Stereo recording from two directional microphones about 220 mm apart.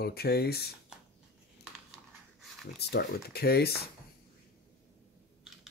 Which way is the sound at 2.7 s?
45° left (ahead or behind).